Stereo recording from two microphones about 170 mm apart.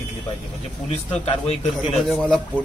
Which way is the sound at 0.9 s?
35° left (ahead or behind).